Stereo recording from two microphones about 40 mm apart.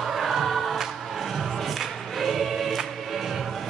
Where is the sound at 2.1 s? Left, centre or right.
Centre.